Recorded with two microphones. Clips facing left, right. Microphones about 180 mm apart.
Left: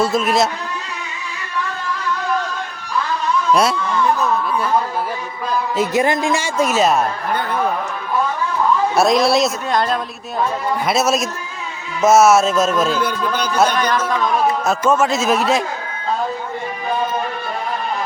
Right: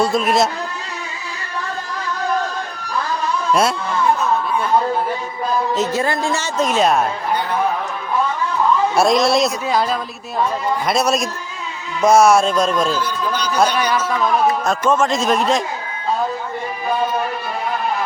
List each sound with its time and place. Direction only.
0.0 s speech: centre (ahead or behind)
3.5 s a man's voice: centre (ahead or behind)
5.7 s a woman's voice: 15° left (ahead or behind)
9.0 s a man's voice: centre (ahead or behind)
13.0 s speech: 55° left (ahead or behind)
13.7 s speech: 10° right (ahead or behind)
14.6 s a man's voice: 5° left (ahead or behind)